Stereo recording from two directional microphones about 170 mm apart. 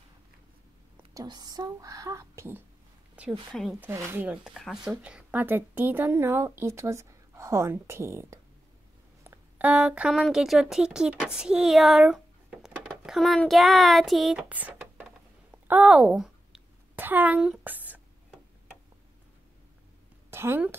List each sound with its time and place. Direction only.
1.1 s a woman's voice: 25° right (ahead or behind)
15.7 s a sound: 10° right (ahead or behind)
20.2 s a woman's voice: 15° right (ahead or behind)